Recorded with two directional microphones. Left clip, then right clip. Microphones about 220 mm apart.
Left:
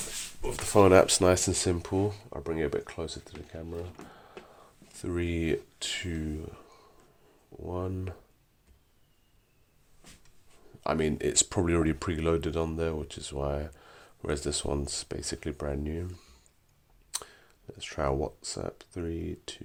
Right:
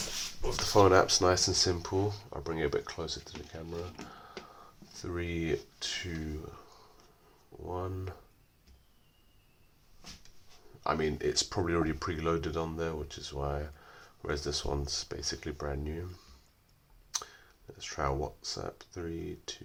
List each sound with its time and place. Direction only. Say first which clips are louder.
0.4 s speech: left 2 dB; 35° left (ahead or behind)
4.1 s a sound: right 2 dB; 35° left (ahead or behind)
4.9 s speech: left 4 dB; 50° left (ahead or behind)
10.8 s speech: left 2 dB; 45° left (ahead or behind)
17.1 s speech: right 1 dB; 45° left (ahead or behind)